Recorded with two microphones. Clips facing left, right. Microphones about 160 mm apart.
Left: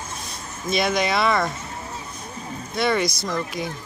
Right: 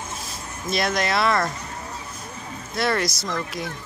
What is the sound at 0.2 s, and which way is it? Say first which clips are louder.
Speech: even; centre (ahead or behind).